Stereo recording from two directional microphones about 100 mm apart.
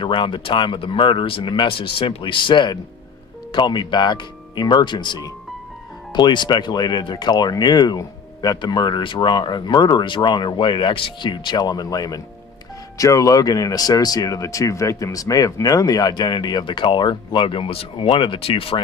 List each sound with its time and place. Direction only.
0.0 s speech: 55° left (ahead or behind)